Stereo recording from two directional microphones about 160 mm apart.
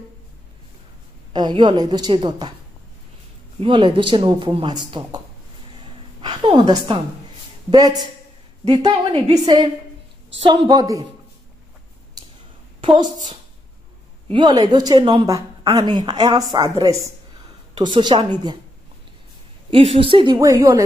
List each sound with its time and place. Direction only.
1.3 s a woman's voice: 30° right (ahead or behind)
3.6 s a woman's voice: 30° right (ahead or behind)
6.2 s a woman's voice: 30° right (ahead or behind)
12.2 s a sound: 25° right (ahead or behind)
12.8 s a woman's voice: 25° right (ahead or behind)
14.3 s a woman's voice: 25° right (ahead or behind)
19.7 s a woman's voice: 35° right (ahead or behind)
20.3 s a woman's voice: 20° right (ahead or behind)